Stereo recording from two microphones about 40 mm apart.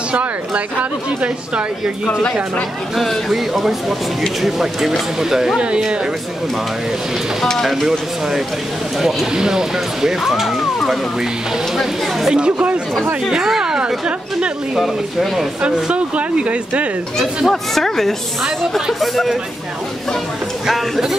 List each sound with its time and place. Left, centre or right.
3.3 s speech: centre
9.0 s speech: centre
12.3 s speech: right
13.3 s a sound: centre
14.8 s speech: centre
15.6 s speech: right
17.5 s speech: centre
20.6 s speech: centre